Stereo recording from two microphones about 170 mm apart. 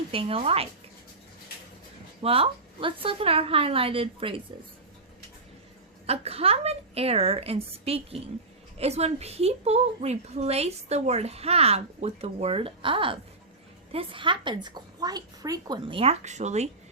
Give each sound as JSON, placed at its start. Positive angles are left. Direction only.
{"t": 0.1, "sound": "a woman's voice", "side_deg": -35}
{"t": 2.2, "sound": "a woman's voice", "side_deg": -35}
{"t": 6.1, "sound": "a woman's voice", "side_deg": -35}